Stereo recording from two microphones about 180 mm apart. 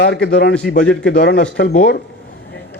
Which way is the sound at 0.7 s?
55° left (ahead or behind).